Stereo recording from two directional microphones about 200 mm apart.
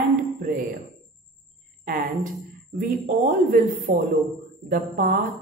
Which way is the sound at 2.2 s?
40° right (ahead or behind).